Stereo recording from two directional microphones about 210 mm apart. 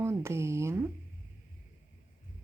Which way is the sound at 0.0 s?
10° right (ahead or behind).